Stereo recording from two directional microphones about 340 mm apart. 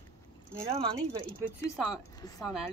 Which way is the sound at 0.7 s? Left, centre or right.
Centre.